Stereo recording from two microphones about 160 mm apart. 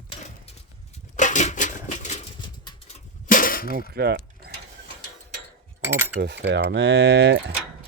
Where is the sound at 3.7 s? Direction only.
80° right.